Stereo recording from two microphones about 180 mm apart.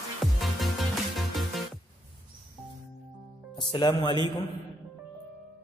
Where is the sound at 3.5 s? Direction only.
25° left (ahead or behind).